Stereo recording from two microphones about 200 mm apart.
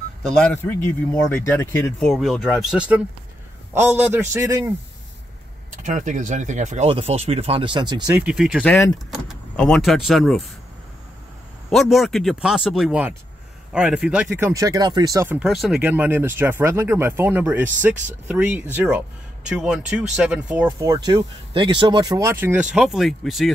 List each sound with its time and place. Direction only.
0.5 s speech: 10° left (ahead or behind); by 4.7 s 15° right (ahead or behind)
5.8 s speech: 40° right (ahead or behind); by 8.1 s 20° right (ahead or behind)
8.1 s speech: 5° right (ahead or behind)
11.7 s speech: centre (ahead or behind)